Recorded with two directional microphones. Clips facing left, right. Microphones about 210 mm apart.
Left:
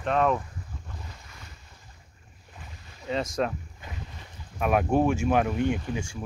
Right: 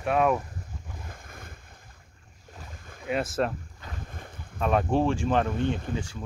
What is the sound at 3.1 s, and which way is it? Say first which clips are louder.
Speech: right 1 dB; 5° right (ahead or behind).